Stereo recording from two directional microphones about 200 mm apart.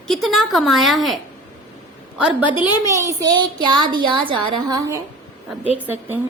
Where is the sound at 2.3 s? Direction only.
5° right (ahead or behind).